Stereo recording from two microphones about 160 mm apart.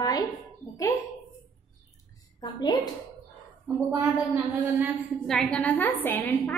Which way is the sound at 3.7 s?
10° right (ahead or behind).